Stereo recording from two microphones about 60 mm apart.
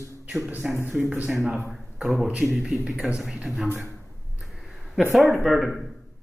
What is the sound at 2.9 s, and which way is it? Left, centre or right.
Speech, right.